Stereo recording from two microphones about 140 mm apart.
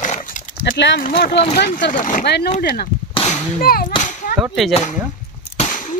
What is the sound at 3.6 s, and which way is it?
Speech, 90° left.